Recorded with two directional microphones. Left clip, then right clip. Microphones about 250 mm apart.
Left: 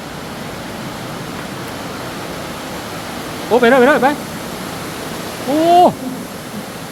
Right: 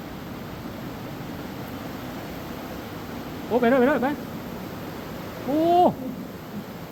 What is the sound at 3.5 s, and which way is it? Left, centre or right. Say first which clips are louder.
Speech: left 10 dB; centre.